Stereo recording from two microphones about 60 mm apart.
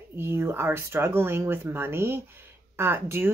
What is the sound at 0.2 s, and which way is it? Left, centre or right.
Speech, right.